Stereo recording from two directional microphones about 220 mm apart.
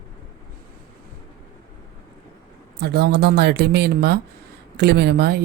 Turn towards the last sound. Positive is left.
turn(degrees=-50)  # may be behind; listen again after turning